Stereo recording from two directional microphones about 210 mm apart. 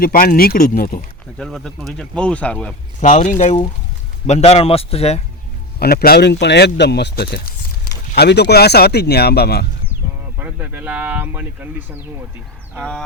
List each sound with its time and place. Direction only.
0.0 s speech: 45° left (ahead or behind)
1.4 s speech: centre (ahead or behind)
3.0 s a man's voice: 35° left (ahead or behind)
5.8 s speech: 45° left (ahead or behind)
10.3 s speech: 10° right (ahead or behind)